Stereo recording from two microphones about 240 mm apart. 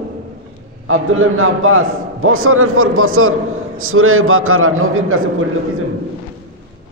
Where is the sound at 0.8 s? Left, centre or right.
Right.